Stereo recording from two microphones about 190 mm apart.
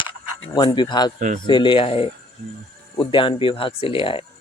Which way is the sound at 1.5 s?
25° left (ahead or behind).